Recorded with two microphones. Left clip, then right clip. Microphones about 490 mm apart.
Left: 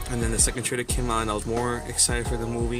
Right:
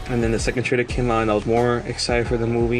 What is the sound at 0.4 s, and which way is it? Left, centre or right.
Speech, left.